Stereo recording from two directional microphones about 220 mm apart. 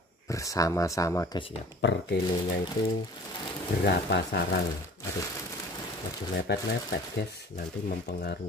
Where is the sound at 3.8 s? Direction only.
50° left (ahead or behind).